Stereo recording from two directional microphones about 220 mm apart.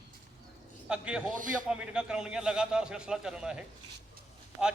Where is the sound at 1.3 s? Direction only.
35° right (ahead or behind).